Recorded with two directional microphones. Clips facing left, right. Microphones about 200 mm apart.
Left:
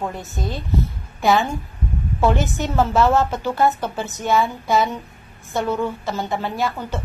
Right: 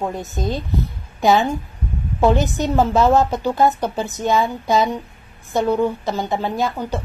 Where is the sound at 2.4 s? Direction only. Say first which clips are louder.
Right 3 dB; 15° right (ahead or behind).